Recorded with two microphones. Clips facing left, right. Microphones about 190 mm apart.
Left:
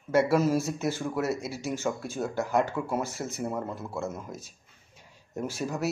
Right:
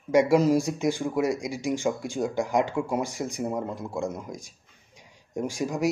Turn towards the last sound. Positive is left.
turn(degrees=-15)  # may be behind; listen again after turning